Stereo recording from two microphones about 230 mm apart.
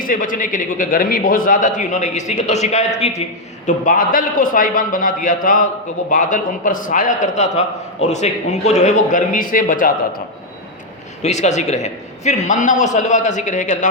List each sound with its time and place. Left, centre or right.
0.0 s a man's voice: left
11.2 s a man's voice: left